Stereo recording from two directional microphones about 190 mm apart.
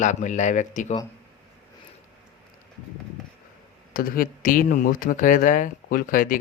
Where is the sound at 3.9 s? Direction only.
50° left (ahead or behind).